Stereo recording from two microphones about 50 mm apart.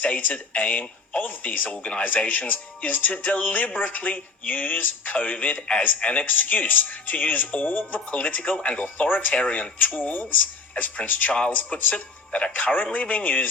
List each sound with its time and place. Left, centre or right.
0.0 s speech: left